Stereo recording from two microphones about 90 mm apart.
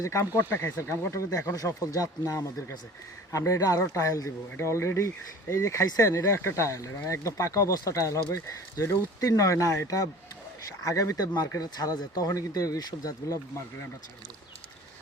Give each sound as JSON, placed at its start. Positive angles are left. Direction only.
{"t": 0.0, "sound": "a man's voice", "side_deg": 30}